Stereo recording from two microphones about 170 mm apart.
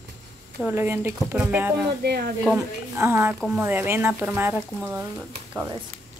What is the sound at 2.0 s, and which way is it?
Speech, 70° right (ahead or behind).